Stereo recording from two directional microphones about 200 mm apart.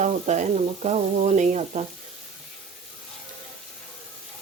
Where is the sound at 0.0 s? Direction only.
35° right (ahead or behind).